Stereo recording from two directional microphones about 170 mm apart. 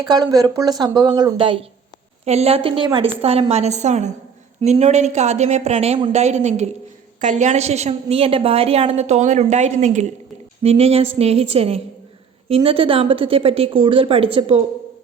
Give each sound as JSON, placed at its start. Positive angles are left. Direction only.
{"t": 0.0, "sound": "a woman's voice", "side_deg": -25}